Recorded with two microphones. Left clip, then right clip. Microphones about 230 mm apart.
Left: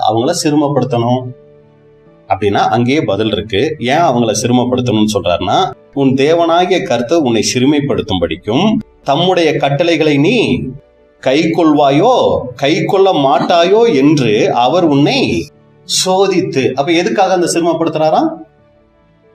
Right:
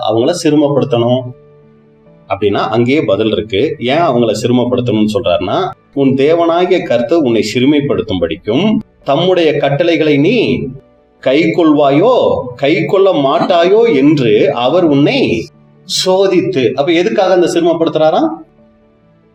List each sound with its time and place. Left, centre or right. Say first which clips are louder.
0.0 s a man's voice: right 1 dB; left
2.2 s a man's voice: left 1 dB; left